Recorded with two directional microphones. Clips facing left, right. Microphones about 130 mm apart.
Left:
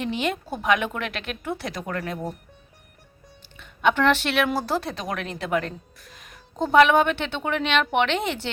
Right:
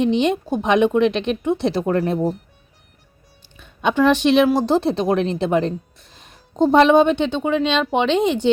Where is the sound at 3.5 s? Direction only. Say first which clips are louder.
Right 2 dB; 15° right (ahead or behind).